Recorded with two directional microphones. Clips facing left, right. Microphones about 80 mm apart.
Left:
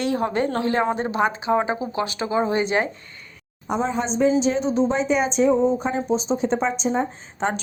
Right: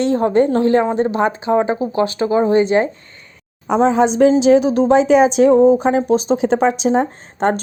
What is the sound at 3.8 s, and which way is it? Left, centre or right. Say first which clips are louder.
A woman's voice: right 9 dB; right.